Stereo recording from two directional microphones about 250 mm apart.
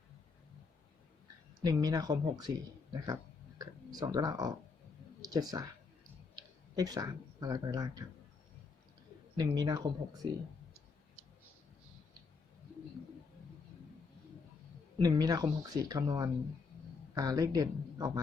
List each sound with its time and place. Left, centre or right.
1.6 s speech: centre
3.6 s speech: centre
6.7 s speech: centre
9.4 s speech: centre
14.9 s speech: centre